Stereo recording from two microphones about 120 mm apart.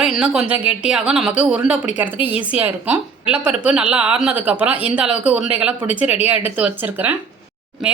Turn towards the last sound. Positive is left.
turn(degrees=-5)  # may be behind; listen again after turning